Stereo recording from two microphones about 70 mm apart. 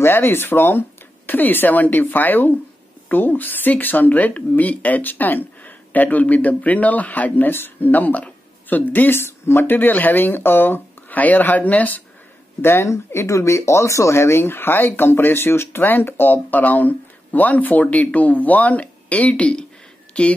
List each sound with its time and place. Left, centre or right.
0.0 s speech: left
12.6 s speech: left; by 20.3 s centre